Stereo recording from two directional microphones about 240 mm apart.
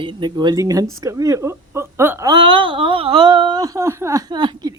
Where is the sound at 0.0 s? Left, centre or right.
Centre.